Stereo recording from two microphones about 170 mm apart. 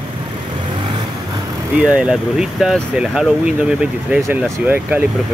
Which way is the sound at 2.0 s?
5° right (ahead or behind).